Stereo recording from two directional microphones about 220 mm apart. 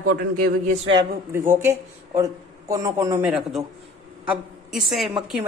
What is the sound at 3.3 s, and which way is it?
A woman's voice, centre (ahead or behind).